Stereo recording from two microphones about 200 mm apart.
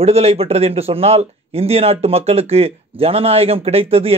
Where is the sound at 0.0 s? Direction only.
30° right (ahead or behind).